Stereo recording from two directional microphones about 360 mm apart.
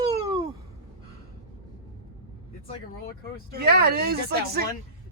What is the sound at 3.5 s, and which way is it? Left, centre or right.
Speech, right.